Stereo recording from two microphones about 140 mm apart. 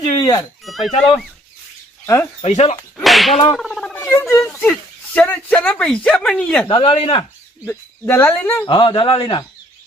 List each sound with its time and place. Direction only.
0.2 s speech: 25° left (ahead or behind)
0.6 s speech: centre (ahead or behind)
2.4 s speech: 50° left (ahead or behind)
3.0 s speech: centre (ahead or behind)
3.6 s a sound: 5° left (ahead or behind)
4.7 s speech: 10° left (ahead or behind)
6.7 s speech: 40° left (ahead or behind)
7.6 s speech: 15° left (ahead or behind)
8.6 s speech: 35° left (ahead or behind)